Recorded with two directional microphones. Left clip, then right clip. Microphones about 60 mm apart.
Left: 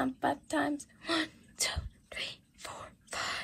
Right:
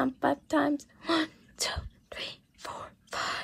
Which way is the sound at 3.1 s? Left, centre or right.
Right.